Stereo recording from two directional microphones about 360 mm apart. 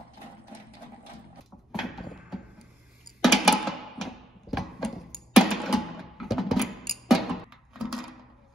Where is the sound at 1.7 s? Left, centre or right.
Centre.